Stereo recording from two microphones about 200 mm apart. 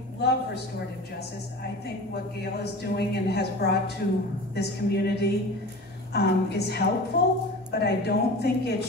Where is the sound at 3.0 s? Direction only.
55° left (ahead or behind).